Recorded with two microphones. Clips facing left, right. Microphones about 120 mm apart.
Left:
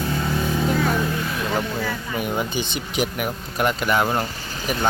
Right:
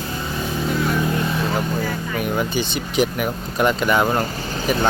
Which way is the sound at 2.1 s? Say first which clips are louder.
Right 3 dB; 20° left (ahead or behind).